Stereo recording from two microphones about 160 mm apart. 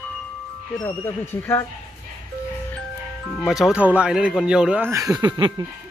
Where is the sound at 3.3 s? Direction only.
Centre (ahead or behind); by 5.7 s 25° right (ahead or behind).